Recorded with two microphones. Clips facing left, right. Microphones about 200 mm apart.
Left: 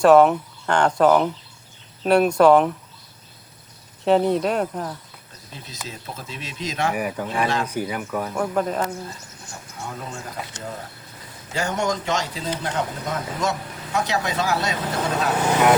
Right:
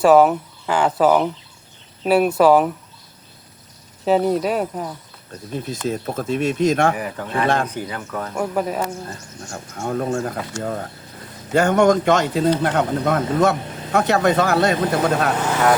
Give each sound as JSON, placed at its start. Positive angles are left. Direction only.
{"t": 0.0, "sound": "speech", "side_deg": -5}
{"t": 4.0, "sound": "speech", "side_deg": -5}
{"t": 5.5, "sound": "speech", "side_deg": -50}
{"t": 6.9, "sound": "speech", "side_deg": 15}
{"t": 7.4, "sound": "speech", "side_deg": -55}
{"t": 7.7, "sound": "speech", "side_deg": 10}
{"t": 8.4, "sound": "speech", "side_deg": -10}
{"t": 9.0, "sound": "speech", "side_deg": -55}